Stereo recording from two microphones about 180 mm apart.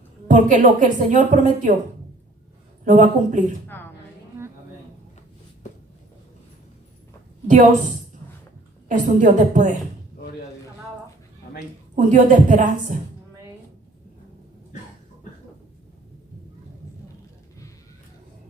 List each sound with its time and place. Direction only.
0.3 s a woman's voice: 45° right (ahead or behind)
2.8 s a woman's voice: 45° right (ahead or behind)
3.7 s speech: 10° left (ahead or behind)
4.4 s a sound: 15° right (ahead or behind)
7.4 s a woman's voice: 45° right (ahead or behind)
8.9 s a woman's voice: 45° right (ahead or behind)
11.9 s a woman's voice: 45° right (ahead or behind)